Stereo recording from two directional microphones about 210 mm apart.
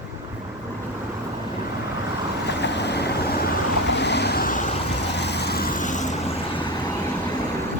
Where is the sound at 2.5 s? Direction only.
55° left (ahead or behind).